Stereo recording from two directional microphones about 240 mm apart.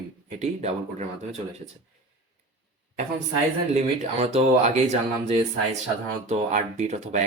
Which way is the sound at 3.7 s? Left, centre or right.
Right.